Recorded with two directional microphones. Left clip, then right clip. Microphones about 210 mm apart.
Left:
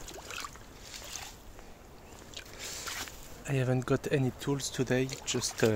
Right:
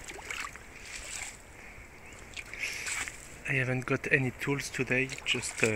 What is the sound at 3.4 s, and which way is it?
Speech, 25° left (ahead or behind).